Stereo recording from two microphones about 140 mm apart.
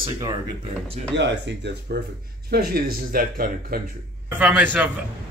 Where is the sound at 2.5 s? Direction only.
90° right.